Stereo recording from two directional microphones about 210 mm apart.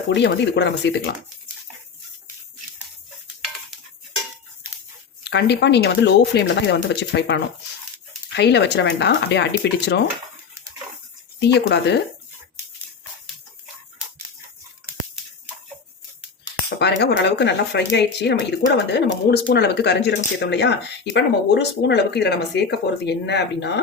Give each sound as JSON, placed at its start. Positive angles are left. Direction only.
{"t": 0.1, "sound": "speech", "side_deg": 55}
{"t": 5.2, "sound": "speech", "side_deg": 55}
{"t": 8.4, "sound": "speech", "side_deg": 55}
{"t": 11.3, "sound": "speech", "side_deg": 55}
{"t": 16.8, "sound": "speech", "side_deg": 55}